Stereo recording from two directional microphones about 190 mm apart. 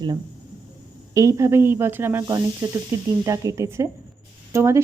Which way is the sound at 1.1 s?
15° right (ahead or behind).